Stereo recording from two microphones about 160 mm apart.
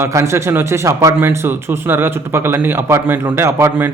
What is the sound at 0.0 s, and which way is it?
A man's voice, 15° right (ahead or behind).